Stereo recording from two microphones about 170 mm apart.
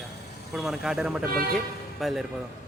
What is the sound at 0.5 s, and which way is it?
Speech, centre (ahead or behind).